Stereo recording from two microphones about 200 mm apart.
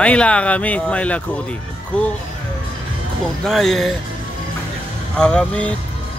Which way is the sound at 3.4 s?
Centre (ahead or behind).